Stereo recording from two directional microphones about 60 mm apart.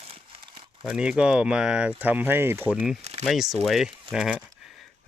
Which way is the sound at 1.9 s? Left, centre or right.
Right.